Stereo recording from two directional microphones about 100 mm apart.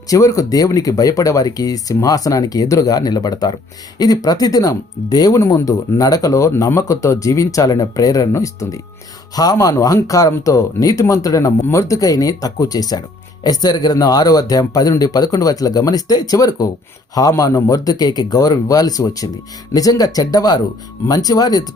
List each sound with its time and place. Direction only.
0.1 s speech: 35° left (ahead or behind)